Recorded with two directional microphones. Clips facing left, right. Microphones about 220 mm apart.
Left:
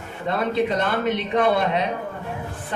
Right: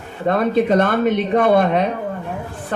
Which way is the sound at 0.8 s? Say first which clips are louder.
Right 6 dB; 50° right (ahead or behind).